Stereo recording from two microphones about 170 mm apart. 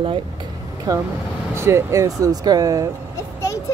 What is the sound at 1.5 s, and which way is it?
Speech, 15° right (ahead or behind).